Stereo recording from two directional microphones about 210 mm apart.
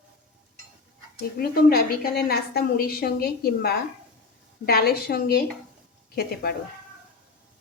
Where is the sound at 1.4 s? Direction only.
45° left (ahead or behind).